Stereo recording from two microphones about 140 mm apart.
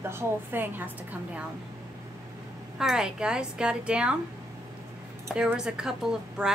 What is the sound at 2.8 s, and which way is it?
A woman's voice, 5° right (ahead or behind).